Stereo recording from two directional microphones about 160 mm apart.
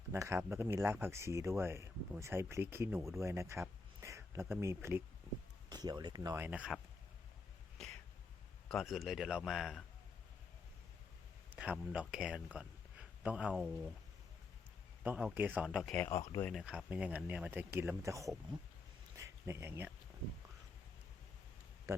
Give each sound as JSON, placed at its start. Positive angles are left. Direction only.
{"t": 0.1, "sound": "speech", "side_deg": -15}
{"t": 8.7, "sound": "speech", "side_deg": 0}
{"t": 11.5, "sound": "speech", "side_deg": -5}
{"t": 15.0, "sound": "speech", "side_deg": -10}
{"t": 19.1, "sound": "a sound", "side_deg": -20}